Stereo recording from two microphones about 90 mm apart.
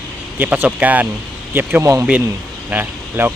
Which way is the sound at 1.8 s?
35° right (ahead or behind).